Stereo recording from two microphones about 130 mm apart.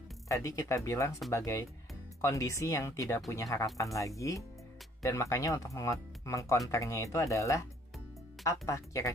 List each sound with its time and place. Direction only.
0.3 s speech: 25° left (ahead or behind)